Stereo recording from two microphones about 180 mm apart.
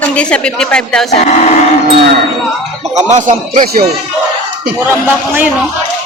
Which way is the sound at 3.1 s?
45° right (ahead or behind).